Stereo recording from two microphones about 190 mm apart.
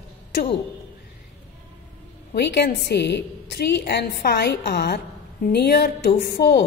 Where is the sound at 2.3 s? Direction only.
60° left (ahead or behind).